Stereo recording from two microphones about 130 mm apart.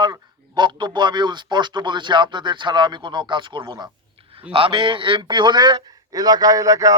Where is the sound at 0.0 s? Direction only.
35° right (ahead or behind).